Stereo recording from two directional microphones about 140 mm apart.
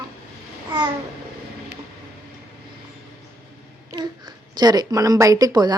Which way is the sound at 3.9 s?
30° right (ahead or behind).